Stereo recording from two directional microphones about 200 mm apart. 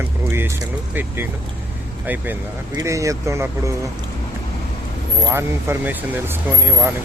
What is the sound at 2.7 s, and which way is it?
Speech, 15° right (ahead or behind).